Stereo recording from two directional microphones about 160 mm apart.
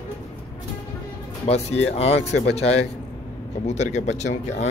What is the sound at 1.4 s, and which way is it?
Speech, 40° left (ahead or behind).